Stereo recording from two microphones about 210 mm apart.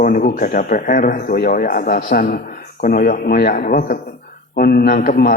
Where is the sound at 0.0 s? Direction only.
40° left (ahead or behind).